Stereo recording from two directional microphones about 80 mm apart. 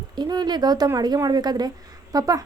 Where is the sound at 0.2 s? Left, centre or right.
Right.